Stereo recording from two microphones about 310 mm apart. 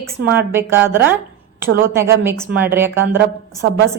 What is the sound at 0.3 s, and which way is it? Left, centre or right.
A woman's voice, centre.